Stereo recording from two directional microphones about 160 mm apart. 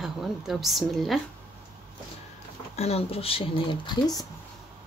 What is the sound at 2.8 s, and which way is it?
Speech, 40° left (ahead or behind).